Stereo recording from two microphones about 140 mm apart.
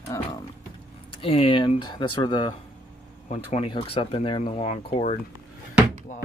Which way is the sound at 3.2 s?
50° left (ahead or behind).